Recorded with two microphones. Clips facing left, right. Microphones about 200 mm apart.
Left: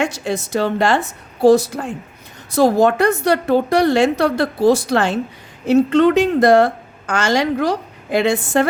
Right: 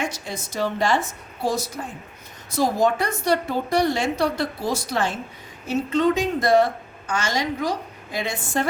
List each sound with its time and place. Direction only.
0.0 s a woman's voice: 70° left (ahead or behind)